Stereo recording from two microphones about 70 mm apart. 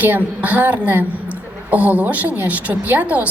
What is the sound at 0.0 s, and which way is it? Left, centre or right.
A woman's voice, right.